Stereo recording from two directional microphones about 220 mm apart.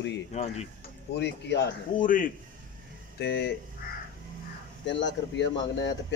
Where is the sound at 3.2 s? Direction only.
50° left (ahead or behind).